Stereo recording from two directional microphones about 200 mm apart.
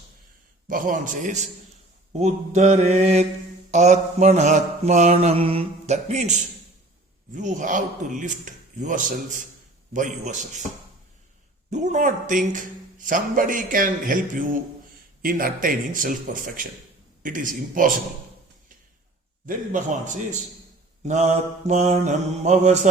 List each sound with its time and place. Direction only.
0.7 s mantra: 40° right (ahead or behind)
11.7 s mantra: 35° right (ahead or behind)
12.5 s a man's voice: 40° right (ahead or behind)
19.5 s mantra: 40° right (ahead or behind)